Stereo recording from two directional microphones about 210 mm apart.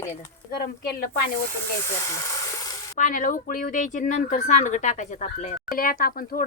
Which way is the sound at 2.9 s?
40° left (ahead or behind).